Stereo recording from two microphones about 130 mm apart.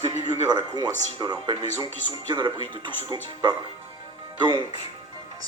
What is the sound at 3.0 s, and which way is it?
Speech, 25° right (ahead or behind).